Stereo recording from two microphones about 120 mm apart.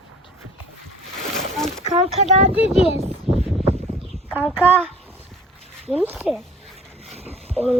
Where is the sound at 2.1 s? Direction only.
60° right (ahead or behind).